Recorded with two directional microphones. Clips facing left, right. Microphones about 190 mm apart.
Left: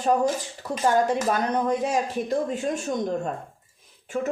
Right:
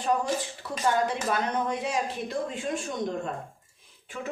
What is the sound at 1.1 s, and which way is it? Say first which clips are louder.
Speech: left 5 dB; 40° left (ahead or behind).